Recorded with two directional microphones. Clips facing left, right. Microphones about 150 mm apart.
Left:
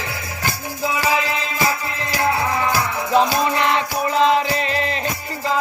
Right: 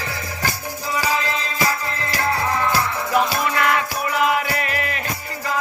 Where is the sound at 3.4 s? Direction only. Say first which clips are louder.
Left 1 dB; 25° left (ahead or behind).